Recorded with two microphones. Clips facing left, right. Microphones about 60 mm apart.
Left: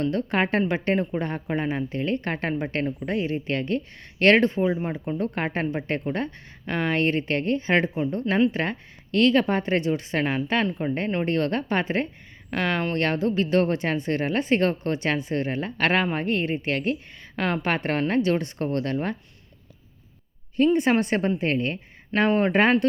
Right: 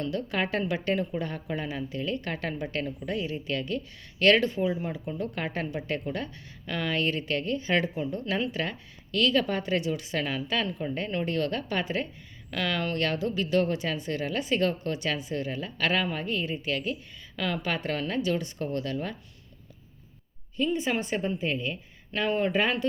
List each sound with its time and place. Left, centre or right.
0.0 s speech: left
20.7 s speech: left